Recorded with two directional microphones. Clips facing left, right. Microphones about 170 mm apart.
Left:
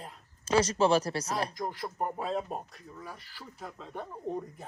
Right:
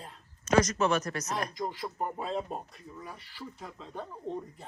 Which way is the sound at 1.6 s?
Centre (ahead or behind).